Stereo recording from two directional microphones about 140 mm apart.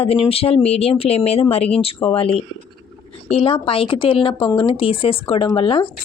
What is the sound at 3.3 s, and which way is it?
Speech, 45° left (ahead or behind).